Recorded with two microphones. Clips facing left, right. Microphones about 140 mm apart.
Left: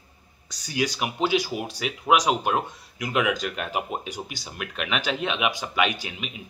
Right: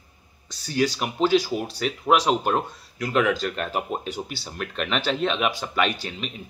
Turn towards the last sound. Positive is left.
turn(degrees=10)  # may be behind; listen again after turning